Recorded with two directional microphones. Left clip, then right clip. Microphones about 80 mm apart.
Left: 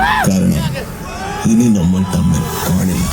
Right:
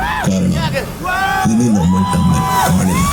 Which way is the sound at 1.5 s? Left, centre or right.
Left.